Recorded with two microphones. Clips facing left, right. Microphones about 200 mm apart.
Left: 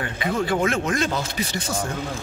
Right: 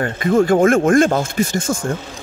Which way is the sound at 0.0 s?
45° right (ahead or behind).